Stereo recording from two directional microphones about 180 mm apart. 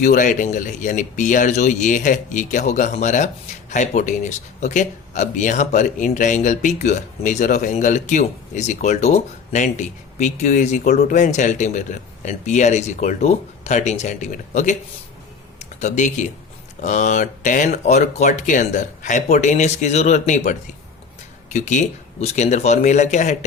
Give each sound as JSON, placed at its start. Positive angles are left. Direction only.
{"t": 0.0, "sound": "speech", "side_deg": 45}